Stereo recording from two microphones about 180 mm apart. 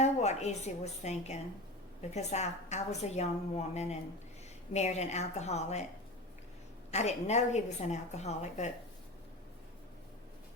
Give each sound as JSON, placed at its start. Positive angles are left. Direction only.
{"t": 0.0, "sound": "a woman's voice", "side_deg": 40}
{"t": 6.9, "sound": "a woman's voice", "side_deg": 40}